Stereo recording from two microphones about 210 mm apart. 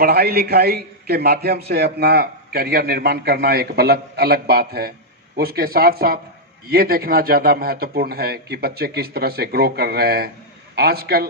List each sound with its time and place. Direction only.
0.0 s a man's voice: 45° right (ahead or behind)